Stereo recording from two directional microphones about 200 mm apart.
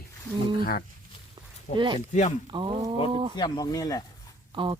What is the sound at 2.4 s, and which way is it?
Speech, 25° right (ahead or behind).